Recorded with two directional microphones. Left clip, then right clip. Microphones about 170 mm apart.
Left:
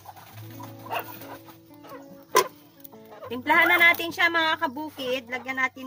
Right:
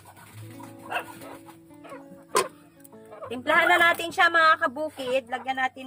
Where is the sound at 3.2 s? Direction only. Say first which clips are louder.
Left 1 dB; 50° right (ahead or behind).